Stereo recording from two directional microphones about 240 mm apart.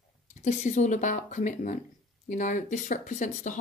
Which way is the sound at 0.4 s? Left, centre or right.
Left.